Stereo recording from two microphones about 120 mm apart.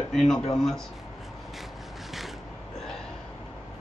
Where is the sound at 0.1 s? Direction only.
5° left (ahead or behind).